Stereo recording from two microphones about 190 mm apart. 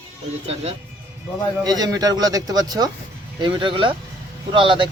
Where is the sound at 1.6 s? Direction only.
20° right (ahead or behind).